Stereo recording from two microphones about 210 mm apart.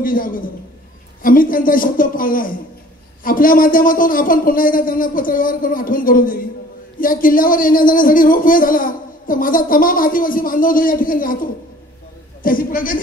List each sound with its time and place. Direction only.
0.0 s speech: 40° left (ahead or behind)